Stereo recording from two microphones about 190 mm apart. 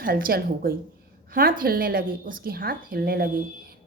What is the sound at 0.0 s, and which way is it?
A woman's voice, 50° right (ahead or behind).